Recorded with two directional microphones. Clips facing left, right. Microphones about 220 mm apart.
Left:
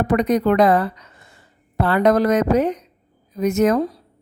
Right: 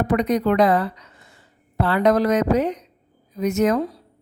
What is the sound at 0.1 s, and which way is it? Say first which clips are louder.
Speech: left 3 dB; 50° left (ahead or behind).